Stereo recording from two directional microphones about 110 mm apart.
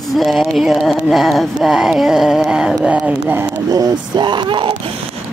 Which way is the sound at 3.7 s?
35° right (ahead or behind).